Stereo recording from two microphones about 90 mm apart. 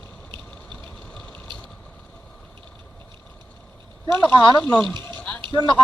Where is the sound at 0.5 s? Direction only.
10° left (ahead or behind).